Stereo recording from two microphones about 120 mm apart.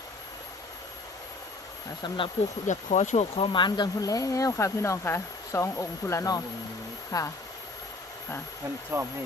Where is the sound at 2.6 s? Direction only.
90° left.